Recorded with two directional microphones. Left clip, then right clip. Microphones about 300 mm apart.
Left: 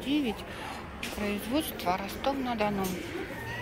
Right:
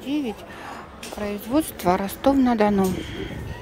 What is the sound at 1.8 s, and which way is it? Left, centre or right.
Speech, right.